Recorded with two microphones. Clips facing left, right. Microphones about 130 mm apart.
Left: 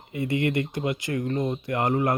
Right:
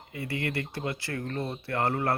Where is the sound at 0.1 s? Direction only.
20° left (ahead or behind).